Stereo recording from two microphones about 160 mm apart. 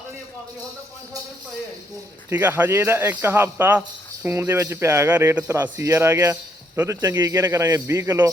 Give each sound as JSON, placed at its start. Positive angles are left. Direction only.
{"t": 2.3, "sound": "a man's voice", "side_deg": -10}